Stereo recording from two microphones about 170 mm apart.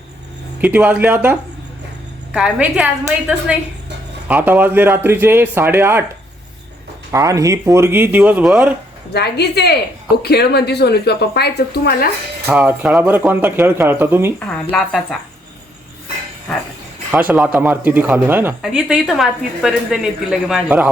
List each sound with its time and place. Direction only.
0.6 s a woman's voice: 10° right (ahead or behind)
7.1 s speech: 20° right (ahead or behind)
9.1 s speech: 75° left (ahead or behind)
12.5 s speech: 10° right (ahead or behind)
14.3 s a woman's voice: 5° left (ahead or behind)
17.1 s a woman's voice: 10° right (ahead or behind)